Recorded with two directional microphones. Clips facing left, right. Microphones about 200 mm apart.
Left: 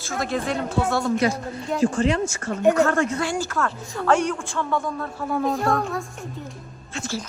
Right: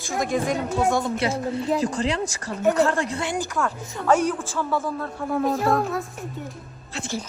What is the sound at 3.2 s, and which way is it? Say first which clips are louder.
A man's voice: left 1 dB; 15° right (ahead or behind).